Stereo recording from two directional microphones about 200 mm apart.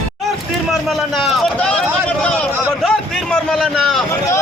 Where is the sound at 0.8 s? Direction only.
Centre (ahead or behind).